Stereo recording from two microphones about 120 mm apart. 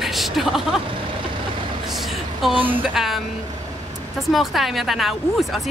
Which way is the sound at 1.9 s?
Centre (ahead or behind).